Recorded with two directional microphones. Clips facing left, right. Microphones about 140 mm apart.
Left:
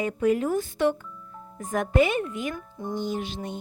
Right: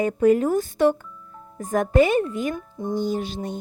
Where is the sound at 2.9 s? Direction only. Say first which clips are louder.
Right 5 dB; 40° right (ahead or behind).